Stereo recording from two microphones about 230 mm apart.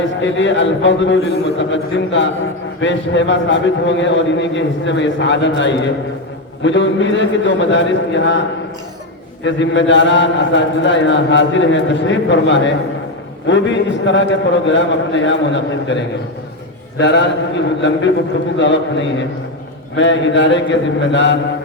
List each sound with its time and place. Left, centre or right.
0.2 s a man's voice: left